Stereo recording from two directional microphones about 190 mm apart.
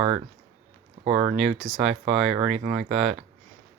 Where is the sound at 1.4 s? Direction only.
Centre (ahead or behind).